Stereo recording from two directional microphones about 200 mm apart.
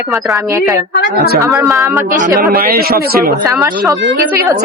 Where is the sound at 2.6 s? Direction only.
50° right (ahead or behind).